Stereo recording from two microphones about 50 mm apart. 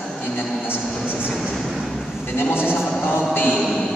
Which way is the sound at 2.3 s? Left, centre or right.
Left.